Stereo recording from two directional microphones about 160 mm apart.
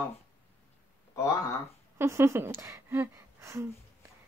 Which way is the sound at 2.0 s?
15° right (ahead or behind).